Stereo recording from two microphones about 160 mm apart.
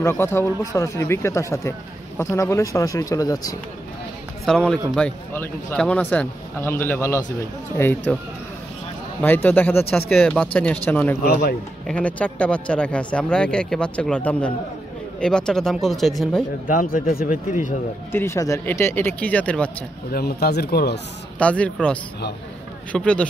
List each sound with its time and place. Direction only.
0.0 s speech: 15° left (ahead or behind)
4.5 s speech: 5° left (ahead or behind)
9.2 s speech: 10° left (ahead or behind)
16.6 s speech: 60° left (ahead or behind)
18.1 s speech: 15° left (ahead or behind)
20.1 s speech: 75° left (ahead or behind); by 21.0 s 90° left
21.4 s speech: 10° left (ahead or behind)
22.9 s speech: 5° left (ahead or behind)